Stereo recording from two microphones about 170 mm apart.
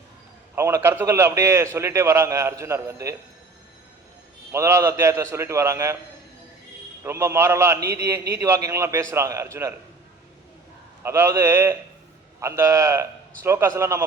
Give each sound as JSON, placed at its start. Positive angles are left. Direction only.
{"t": 0.5, "sound": "a man's voice", "side_deg": -15}
{"t": 4.5, "sound": "a man's voice", "side_deg": -15}
{"t": 7.0, "sound": "a man's voice", "side_deg": -15}
{"t": 11.0, "sound": "a man's voice", "side_deg": -15}